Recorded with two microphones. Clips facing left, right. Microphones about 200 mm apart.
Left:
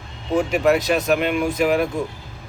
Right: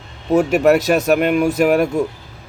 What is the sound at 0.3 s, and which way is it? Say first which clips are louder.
Speech: right 5 dB; 45° right (ahead or behind).